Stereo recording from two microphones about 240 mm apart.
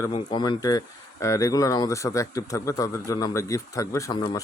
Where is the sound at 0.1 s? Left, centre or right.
Left.